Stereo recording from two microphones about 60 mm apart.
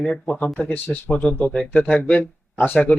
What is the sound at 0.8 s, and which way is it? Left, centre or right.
Speech, left.